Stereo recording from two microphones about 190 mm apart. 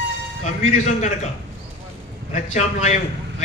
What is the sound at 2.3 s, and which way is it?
A man's voice, 35° left (ahead or behind).